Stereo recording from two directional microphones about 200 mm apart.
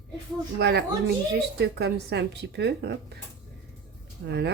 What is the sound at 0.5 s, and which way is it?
Speech, 55° right (ahead or behind).